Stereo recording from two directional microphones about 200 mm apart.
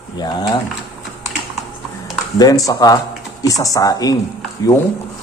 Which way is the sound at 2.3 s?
20° left (ahead or behind).